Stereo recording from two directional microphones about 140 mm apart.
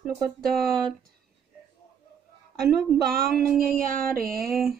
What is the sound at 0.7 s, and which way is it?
Speech, 5° left (ahead or behind).